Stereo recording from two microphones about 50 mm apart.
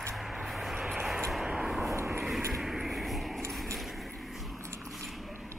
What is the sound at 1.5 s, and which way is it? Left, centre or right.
Vehicle, centre.